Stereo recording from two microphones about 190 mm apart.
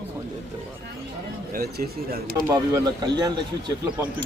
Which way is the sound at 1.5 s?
55° right (ahead or behind).